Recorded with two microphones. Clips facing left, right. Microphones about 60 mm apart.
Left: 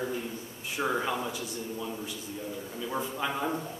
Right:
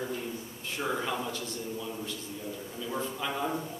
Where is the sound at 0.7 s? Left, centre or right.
Centre.